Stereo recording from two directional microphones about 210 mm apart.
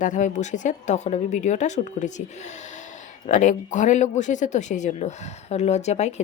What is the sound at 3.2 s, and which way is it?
A woman's voice, 35° left (ahead or behind).